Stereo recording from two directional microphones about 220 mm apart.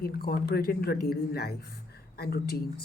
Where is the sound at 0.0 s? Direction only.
45° left (ahead or behind).